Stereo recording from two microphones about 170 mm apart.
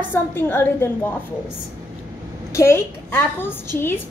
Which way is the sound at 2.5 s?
15° left (ahead or behind).